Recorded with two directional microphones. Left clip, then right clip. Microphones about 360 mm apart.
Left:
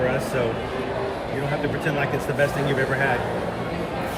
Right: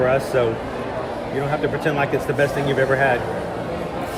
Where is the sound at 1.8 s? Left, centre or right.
Right.